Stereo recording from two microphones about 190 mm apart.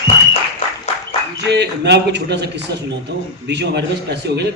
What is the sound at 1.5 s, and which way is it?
A man's voice, 65° right (ahead or behind).